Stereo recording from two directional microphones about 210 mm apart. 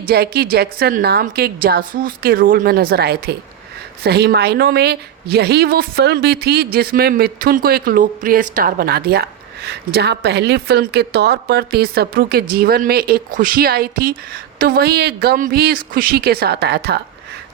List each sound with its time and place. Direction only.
0.1 s a woman's voice: 45° right (ahead or behind)